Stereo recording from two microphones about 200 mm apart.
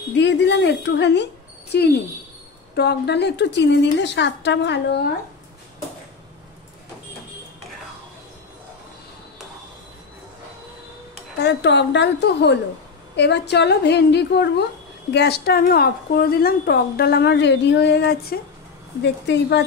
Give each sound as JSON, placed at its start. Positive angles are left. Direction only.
{"t": 0.1, "sound": "a woman's voice", "side_deg": 60}
{"t": 11.3, "sound": "a woman's voice", "side_deg": 60}